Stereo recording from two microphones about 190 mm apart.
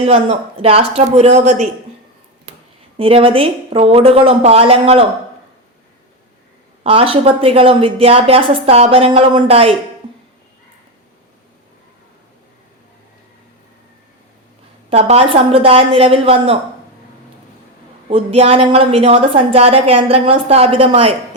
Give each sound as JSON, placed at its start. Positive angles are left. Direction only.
{"t": 0.0, "sound": "a woman's voice", "side_deg": -30}
{"t": 3.0, "sound": "a woman's voice", "side_deg": -30}
{"t": 6.8, "sound": "a woman's voice", "side_deg": -30}
{"t": 14.8, "sound": "a woman's voice", "side_deg": -35}
{"t": 18.1, "sound": "a woman's voice", "side_deg": -30}